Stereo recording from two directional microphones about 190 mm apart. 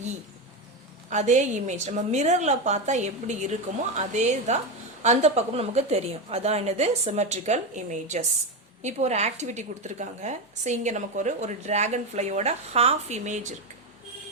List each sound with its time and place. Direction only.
1.1 s a woman's voice: 40° right (ahead or behind)